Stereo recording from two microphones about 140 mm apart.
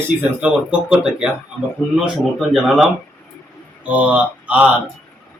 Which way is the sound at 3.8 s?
10° right (ahead or behind).